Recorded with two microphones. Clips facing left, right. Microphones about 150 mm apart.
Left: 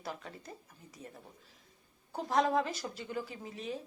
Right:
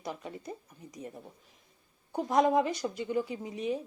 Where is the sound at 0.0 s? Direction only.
15° right (ahead or behind).